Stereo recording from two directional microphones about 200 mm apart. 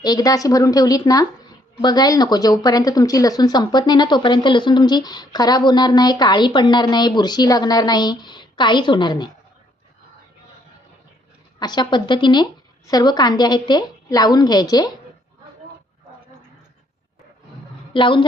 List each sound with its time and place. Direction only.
0.0 s speech: 20° left (ahead or behind)
11.6 s speech: 20° left (ahead or behind)
17.9 s speech: 25° left (ahead or behind)